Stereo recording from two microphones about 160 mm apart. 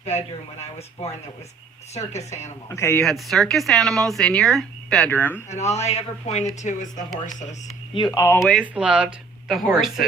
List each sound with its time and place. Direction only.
0.0 s speech: 40° left (ahead or behind)
2.0 s speech: 45° left (ahead or behind)
2.6 s a man's voice: 15° left (ahead or behind)
3.0 s speech: centre (ahead or behind)
5.5 s speech: 45° left (ahead or behind)
7.9 s speech: 25° left (ahead or behind)
8.4 s speech: centre (ahead or behind)